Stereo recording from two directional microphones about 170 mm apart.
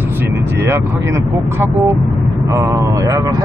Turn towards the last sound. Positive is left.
turn(degrees=-20)  # may be behind; listen again after turning